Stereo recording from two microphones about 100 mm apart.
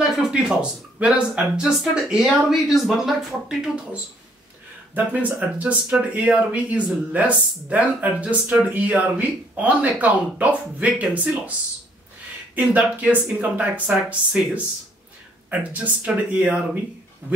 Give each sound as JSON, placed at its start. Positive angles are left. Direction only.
{"t": 0.3, "sound": "speech", "side_deg": -10}
{"t": 12.5, "sound": "speech", "side_deg": -15}